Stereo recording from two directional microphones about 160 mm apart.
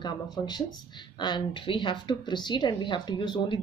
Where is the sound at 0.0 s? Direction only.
25° left (ahead or behind).